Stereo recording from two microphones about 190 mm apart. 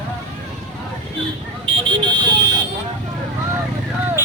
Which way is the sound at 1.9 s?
25° right (ahead or behind).